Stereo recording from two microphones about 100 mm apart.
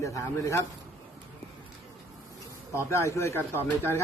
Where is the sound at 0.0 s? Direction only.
30° left (ahead or behind).